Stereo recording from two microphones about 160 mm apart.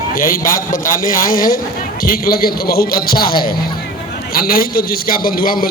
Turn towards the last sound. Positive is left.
turn(degrees=65)  # may be behind; listen again after turning